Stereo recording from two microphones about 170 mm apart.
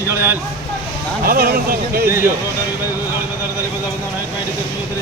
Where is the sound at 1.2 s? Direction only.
60° right (ahead or behind).